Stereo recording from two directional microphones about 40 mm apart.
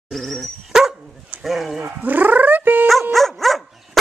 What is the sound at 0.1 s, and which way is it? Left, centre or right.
Dog, centre.